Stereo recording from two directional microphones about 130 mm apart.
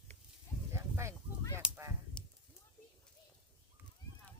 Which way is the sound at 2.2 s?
10° left (ahead or behind).